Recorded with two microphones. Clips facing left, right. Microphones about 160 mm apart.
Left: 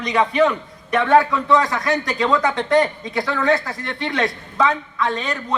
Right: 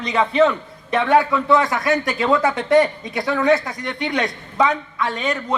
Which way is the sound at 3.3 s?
20° right (ahead or behind).